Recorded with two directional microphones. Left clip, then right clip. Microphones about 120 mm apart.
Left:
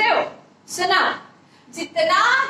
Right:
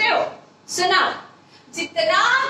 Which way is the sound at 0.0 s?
35° left (ahead or behind).